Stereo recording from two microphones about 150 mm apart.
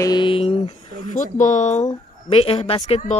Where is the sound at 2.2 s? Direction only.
35° left (ahead or behind).